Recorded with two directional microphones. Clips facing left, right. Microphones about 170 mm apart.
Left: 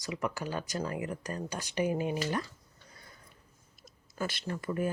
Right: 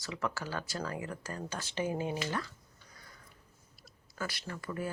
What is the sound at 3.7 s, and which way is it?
Speech, 20° left (ahead or behind).